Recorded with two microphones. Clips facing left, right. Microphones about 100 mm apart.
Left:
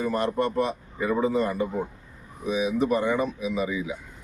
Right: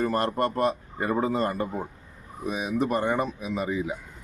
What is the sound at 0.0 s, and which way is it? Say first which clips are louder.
Speech: even; 50° right (ahead or behind).